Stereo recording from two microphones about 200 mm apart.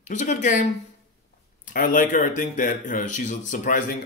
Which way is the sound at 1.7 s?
40° left (ahead or behind).